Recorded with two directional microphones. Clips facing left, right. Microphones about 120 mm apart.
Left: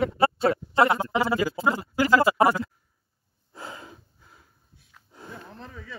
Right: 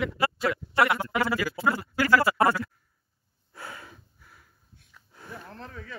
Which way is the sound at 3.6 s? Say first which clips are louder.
Left 2 dB; 20° left (ahead or behind).